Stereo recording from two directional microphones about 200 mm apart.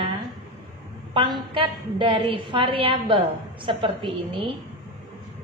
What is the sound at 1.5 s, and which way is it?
A woman's voice, 25° right (ahead or behind).